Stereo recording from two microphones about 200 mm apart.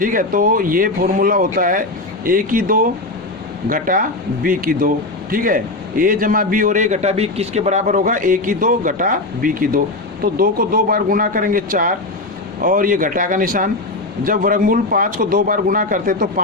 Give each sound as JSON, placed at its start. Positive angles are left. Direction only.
{"t": 0.0, "sound": "a man's voice", "side_deg": -45}